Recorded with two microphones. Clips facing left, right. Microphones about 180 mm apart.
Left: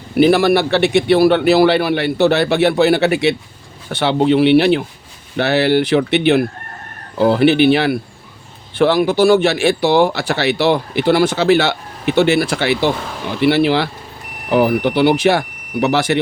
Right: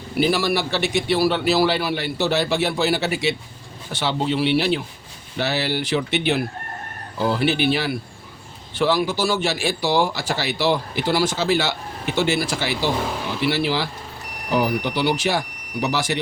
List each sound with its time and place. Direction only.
0.2 s speech: 60° left (ahead or behind)